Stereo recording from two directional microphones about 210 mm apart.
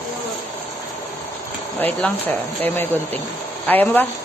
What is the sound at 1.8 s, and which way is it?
Speech, 10° left (ahead or behind).